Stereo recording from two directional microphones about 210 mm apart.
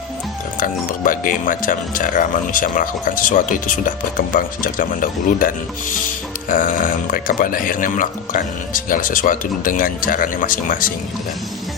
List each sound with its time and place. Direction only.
0.6 s speech: 40° left (ahead or behind)
6.5 s speech: 40° left (ahead or behind)